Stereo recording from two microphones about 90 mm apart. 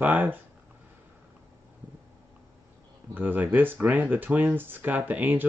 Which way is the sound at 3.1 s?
20° right (ahead or behind).